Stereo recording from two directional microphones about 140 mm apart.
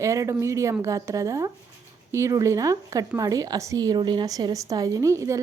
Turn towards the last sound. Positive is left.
turn(degrees=-20)  # may be behind; listen again after turning